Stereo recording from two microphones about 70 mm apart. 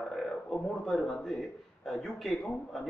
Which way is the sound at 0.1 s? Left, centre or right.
Centre.